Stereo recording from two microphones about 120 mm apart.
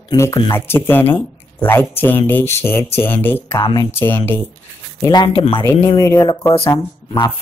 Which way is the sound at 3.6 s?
30° left (ahead or behind).